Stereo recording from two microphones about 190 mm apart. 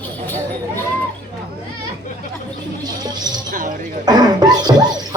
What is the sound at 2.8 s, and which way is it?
Music, 20° right (ahead or behind).